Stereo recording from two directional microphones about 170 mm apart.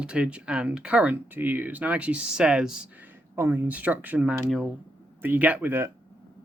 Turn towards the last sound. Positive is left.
turn(degrees=-15)  # may be behind; listen again after turning